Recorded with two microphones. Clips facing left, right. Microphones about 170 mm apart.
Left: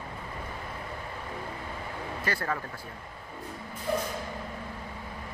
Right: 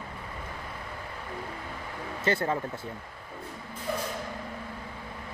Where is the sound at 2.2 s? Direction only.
25° right (ahead or behind).